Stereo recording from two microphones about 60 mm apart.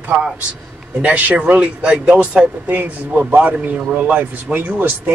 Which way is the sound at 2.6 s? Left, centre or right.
Right.